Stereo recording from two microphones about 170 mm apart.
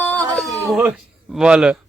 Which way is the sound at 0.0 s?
10° left (ahead or behind).